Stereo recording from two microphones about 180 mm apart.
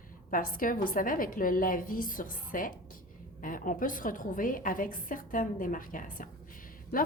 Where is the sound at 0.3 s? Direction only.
50° left (ahead or behind).